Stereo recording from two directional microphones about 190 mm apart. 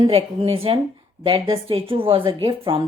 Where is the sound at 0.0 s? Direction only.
30° right (ahead or behind).